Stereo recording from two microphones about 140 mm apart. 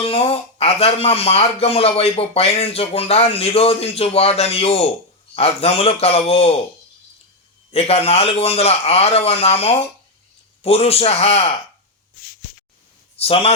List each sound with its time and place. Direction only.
0.0 s speech: 45° left (ahead or behind)
7.7 s speech: 45° left (ahead or behind)
13.1 s a man's voice: 45° left (ahead or behind)